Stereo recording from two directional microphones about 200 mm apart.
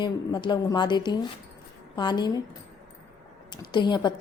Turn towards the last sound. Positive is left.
turn(degrees=20)  # may be behind; listen again after turning